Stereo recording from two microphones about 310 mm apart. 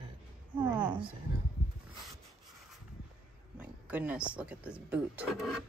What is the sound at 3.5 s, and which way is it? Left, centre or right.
Speech, centre.